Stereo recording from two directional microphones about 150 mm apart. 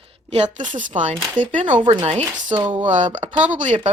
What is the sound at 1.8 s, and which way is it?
Chopping, 30° right (ahead or behind).